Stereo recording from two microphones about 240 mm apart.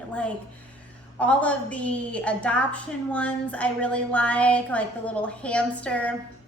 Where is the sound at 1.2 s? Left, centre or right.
Centre.